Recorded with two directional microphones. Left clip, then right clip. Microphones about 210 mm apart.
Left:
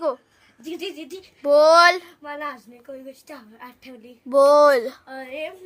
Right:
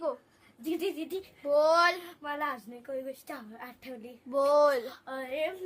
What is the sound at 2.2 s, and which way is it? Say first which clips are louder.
A woman's voice: left 2 dB; 15° right (ahead or behind).